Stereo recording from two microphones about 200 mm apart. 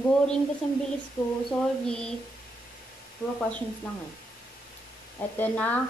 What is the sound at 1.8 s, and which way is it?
Speech, 5° left (ahead or behind).